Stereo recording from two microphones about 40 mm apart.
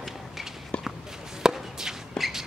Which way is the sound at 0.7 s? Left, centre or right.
Left.